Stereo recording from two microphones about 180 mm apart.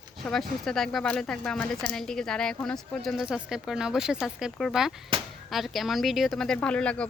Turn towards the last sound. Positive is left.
turn(degrees=5)  # may be behind; listen again after turning